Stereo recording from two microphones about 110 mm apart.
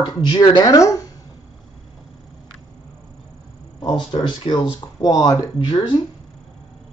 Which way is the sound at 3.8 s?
45° left (ahead or behind).